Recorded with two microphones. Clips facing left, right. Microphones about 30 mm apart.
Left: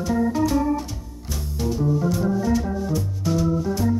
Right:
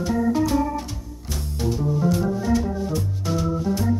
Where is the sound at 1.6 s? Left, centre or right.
Centre.